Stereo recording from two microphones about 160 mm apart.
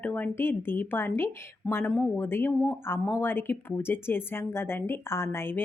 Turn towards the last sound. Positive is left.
turn(degrees=15)  # may be behind; listen again after turning